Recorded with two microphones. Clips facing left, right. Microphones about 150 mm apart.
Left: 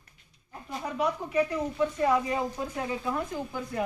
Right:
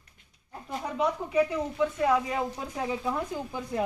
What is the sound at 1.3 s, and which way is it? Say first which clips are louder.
Speech: right 1 dB; 10° right (ahead or behind).